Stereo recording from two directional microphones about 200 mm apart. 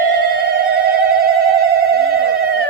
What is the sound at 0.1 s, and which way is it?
Telephone bell ringing, 55° right (ahead or behind).